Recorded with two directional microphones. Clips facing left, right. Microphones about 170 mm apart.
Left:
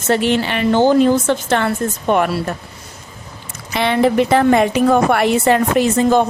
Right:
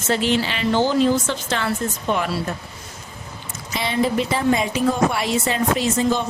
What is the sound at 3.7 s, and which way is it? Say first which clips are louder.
Speech: left 6 dB; 65° left (ahead or behind).